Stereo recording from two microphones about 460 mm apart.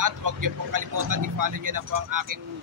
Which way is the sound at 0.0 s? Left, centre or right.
Right.